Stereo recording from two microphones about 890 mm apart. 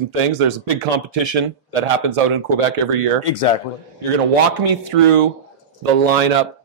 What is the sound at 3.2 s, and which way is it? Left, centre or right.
Speech, left.